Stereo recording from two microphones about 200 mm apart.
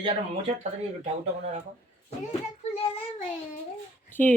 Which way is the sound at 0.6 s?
35° right (ahead or behind).